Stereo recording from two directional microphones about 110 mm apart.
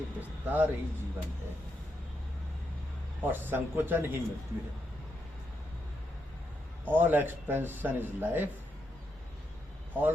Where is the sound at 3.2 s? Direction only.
20° right (ahead or behind).